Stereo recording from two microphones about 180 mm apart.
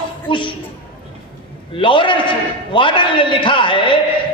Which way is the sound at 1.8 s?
30° left (ahead or behind).